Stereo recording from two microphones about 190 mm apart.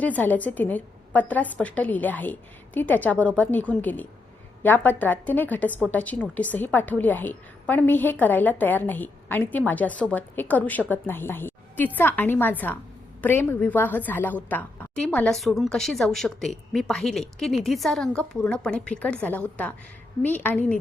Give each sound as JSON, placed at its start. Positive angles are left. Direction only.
{"t": 0.0, "sound": "a woman's voice", "side_deg": 10}